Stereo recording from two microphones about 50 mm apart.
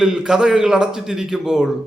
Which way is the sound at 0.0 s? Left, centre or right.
Centre.